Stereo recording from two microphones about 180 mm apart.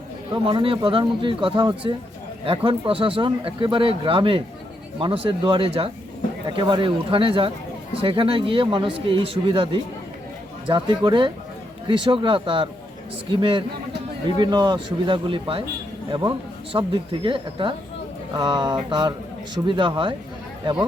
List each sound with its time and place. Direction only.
0.4 s speech: 30° right (ahead or behind)